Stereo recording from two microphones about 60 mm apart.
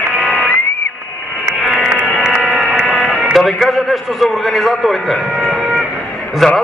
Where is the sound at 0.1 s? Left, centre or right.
Right.